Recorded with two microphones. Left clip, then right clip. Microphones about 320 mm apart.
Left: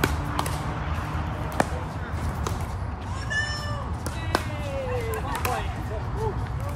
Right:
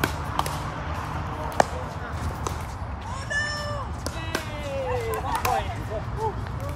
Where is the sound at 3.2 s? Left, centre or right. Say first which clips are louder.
Right 1 dB; centre.